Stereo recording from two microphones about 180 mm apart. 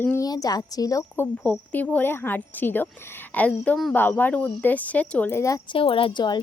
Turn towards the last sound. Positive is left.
turn(degrees=25)  # may be behind; listen again after turning